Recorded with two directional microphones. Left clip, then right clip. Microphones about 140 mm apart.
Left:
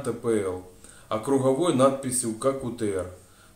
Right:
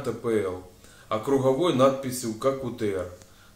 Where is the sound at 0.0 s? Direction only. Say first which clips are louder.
Even; 10° left (ahead or behind).